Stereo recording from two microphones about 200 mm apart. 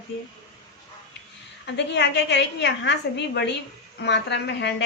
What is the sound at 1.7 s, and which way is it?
A woman's voice, 60° left (ahead or behind).